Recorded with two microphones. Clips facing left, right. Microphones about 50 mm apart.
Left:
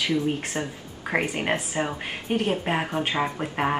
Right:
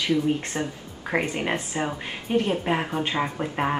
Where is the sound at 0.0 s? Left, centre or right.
Left.